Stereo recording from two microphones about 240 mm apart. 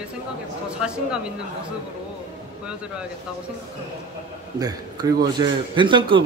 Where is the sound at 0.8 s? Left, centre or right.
Centre.